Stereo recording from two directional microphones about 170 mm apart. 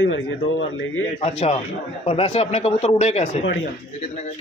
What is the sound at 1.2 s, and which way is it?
Speech, 40° left (ahead or behind).